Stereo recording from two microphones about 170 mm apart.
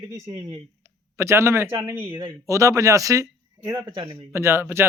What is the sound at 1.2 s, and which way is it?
A man's voice, 15° right (ahead or behind).